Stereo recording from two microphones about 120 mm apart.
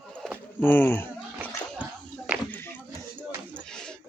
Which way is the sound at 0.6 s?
15° left (ahead or behind).